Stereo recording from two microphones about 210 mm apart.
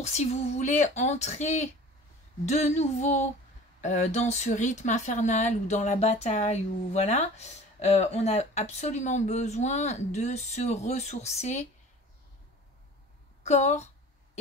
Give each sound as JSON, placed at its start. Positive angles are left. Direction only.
{"t": 0.0, "sound": "speech", "side_deg": 30}
{"t": 13.4, "sound": "a woman's voice", "side_deg": 35}